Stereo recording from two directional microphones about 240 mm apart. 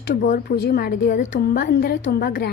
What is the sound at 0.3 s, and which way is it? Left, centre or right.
A woman's voice, left.